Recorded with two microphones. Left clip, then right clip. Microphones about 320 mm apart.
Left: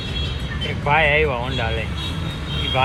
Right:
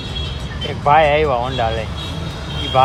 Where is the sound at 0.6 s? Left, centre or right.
Right.